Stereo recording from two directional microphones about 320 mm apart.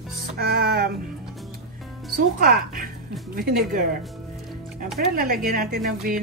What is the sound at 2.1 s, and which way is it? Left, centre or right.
Speech, right.